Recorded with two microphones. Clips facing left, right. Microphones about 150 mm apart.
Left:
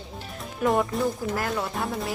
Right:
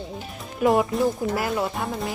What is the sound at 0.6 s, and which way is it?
Speech, centre (ahead or behind).